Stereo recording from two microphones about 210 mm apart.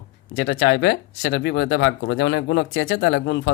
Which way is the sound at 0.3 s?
65° left (ahead or behind).